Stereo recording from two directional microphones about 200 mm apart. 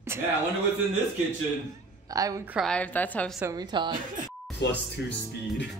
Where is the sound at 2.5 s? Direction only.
5° left (ahead or behind).